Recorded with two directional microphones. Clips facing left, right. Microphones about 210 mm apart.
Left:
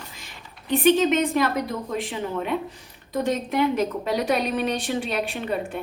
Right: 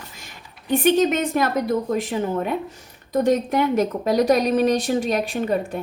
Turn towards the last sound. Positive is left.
turn(degrees=-40)  # may be behind; listen again after turning